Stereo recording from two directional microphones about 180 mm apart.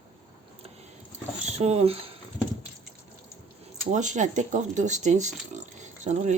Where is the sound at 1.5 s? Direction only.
35° right (ahead or behind).